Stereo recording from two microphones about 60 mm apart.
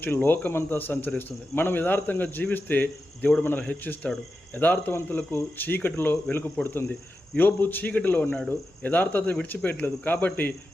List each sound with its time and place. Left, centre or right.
0.0 s speech: left